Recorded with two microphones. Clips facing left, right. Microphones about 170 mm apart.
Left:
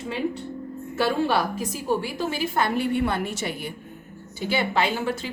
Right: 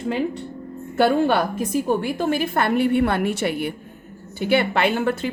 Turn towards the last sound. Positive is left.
turn(degrees=-55)  # may be behind; listen again after turning